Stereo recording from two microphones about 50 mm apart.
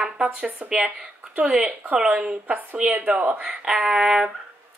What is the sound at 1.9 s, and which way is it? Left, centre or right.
Speech, right.